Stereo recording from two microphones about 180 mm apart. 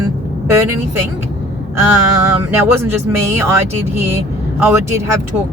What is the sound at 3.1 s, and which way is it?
Speech, 15° right (ahead or behind).